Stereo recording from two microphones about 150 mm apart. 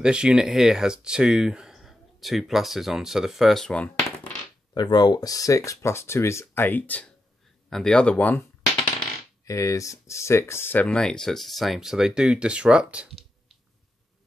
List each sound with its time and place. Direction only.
0.0 s speech: 5° right (ahead or behind)
4.7 s speech: 30° left (ahead or behind); by 13.1 s 5° right (ahead or behind)